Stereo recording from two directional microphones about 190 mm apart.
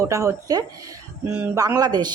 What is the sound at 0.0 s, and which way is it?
Speech, 15° right (ahead or behind).